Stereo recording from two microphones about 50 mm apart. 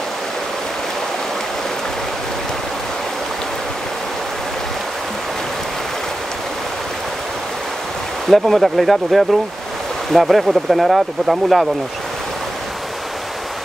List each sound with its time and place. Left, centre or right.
8.3 s speech: centre